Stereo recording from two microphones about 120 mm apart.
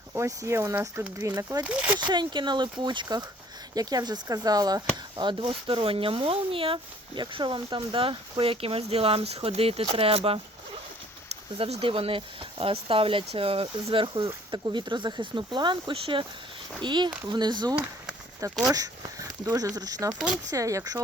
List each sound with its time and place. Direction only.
0.1 s speech: 25° right (ahead or behind)
1.6 s speech: 10° right (ahead or behind)
2.0 s speech: 40° right (ahead or behind)
11.5 s speech: 50° right (ahead or behind); by 20.1 s 30° right (ahead or behind)
20.1 s speech: 5° right (ahead or behind)
20.5 s speech: 25° right (ahead or behind)